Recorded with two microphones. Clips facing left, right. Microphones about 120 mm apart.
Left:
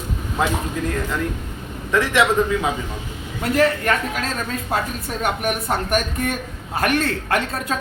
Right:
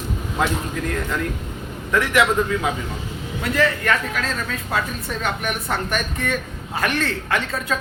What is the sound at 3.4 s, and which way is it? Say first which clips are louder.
A man's voice: left 3 dB; 40° left (ahead or behind).